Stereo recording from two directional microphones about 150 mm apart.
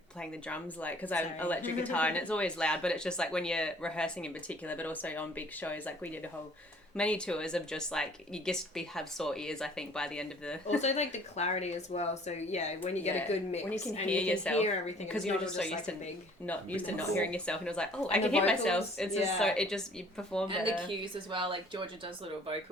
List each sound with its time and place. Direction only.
0.2 s speech: 10° left (ahead or behind)
6.9 s speech: 5° left (ahead or behind)
10.8 s speech: 50° left (ahead or behind)
14.1 s speech: 5° left (ahead or behind)
21.0 s speech: 35° right (ahead or behind)